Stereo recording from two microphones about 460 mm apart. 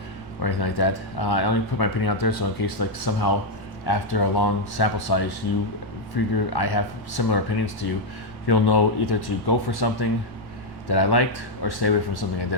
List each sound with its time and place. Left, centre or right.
0.4 s speech: left